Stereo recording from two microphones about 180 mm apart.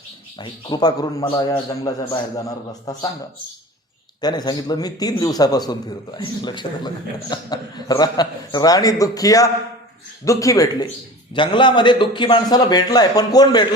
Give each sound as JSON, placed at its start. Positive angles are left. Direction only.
{"t": 0.3, "sound": "a man's voice", "side_deg": 25}
{"t": 4.2, "sound": "a man's voice", "side_deg": 20}